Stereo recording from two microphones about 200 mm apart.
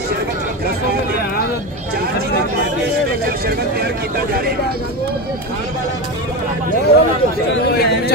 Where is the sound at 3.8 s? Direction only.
50° right (ahead or behind).